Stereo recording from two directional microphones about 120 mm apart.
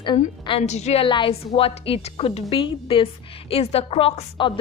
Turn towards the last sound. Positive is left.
turn(degrees=50)  # may be behind; listen again after turning